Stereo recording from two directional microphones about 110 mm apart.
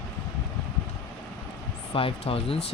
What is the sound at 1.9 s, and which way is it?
Speech, 60° left (ahead or behind).